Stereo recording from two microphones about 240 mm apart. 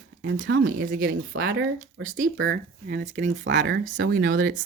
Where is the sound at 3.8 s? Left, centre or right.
Right.